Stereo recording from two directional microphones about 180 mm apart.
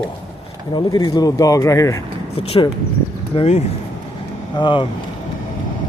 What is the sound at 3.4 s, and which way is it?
Speech, 35° left (ahead or behind).